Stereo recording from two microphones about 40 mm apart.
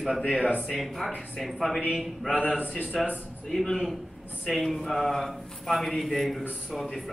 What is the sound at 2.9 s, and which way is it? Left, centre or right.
Speech, centre.